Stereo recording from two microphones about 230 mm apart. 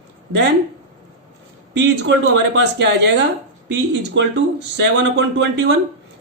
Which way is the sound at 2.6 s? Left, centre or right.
Right.